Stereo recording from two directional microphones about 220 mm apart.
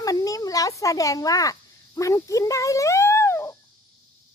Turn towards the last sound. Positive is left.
turn(degrees=10)  # may be behind; listen again after turning